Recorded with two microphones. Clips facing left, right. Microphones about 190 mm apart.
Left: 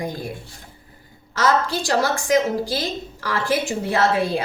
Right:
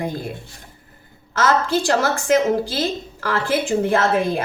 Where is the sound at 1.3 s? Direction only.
55° right (ahead or behind).